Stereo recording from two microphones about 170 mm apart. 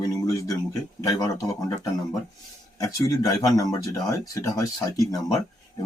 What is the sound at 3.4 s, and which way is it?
Speech, 20° left (ahead or behind).